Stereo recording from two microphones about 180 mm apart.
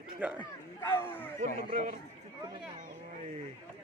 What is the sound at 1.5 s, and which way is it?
Speech, 40° right (ahead or behind).